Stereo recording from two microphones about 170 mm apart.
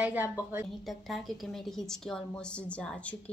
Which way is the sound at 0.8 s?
Centre (ahead or behind).